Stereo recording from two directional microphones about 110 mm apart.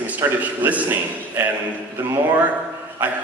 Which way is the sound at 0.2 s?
20° right (ahead or behind).